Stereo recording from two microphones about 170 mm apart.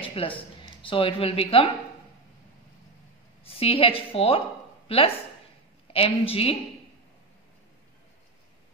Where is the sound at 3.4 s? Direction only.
35° left (ahead or behind).